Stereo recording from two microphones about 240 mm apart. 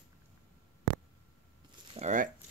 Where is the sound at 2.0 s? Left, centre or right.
Right.